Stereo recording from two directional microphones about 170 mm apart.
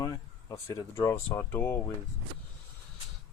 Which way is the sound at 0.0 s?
20° left (ahead or behind).